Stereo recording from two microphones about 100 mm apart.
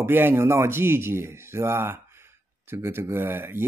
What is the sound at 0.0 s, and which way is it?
Speech, 20° right (ahead or behind).